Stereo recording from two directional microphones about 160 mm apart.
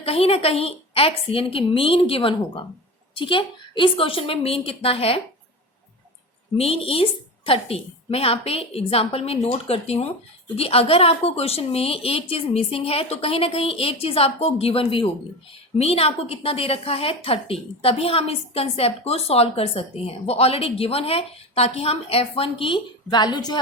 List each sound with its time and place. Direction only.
0.0 s a woman's voice: 35° left (ahead or behind)
6.6 s a woman's voice: 35° left (ahead or behind)